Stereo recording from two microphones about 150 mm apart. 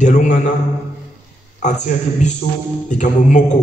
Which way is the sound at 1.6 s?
55° left (ahead or behind).